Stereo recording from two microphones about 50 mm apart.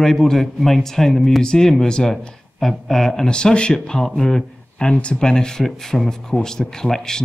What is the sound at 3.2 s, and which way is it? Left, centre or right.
Speech, centre.